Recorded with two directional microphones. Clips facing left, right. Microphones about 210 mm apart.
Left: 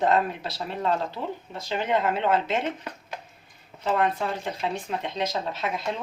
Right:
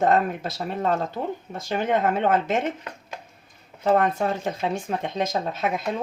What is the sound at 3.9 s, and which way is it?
Speech, 45° right (ahead or behind).